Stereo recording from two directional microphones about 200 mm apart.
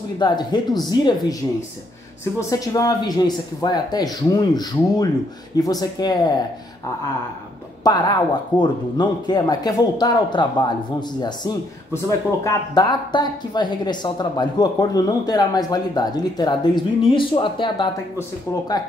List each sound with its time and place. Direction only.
0.2 s speech: 20° left (ahead or behind)
2.5 s speech: 15° left (ahead or behind)
7.8 s speech: 20° left (ahead or behind)